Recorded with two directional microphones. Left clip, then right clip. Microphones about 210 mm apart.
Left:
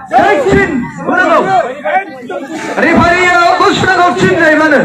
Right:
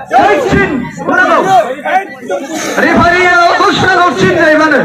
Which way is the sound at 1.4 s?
50° right (ahead or behind).